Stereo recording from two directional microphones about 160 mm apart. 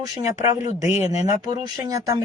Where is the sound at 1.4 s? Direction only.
20° right (ahead or behind).